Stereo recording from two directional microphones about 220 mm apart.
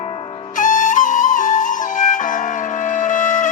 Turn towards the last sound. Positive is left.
turn(degrees=35)  # may be behind; listen again after turning